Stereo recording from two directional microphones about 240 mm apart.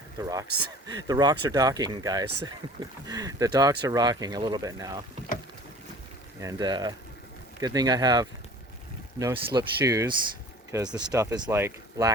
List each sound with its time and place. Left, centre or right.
0.2 s speech: centre
6.4 s speech: centre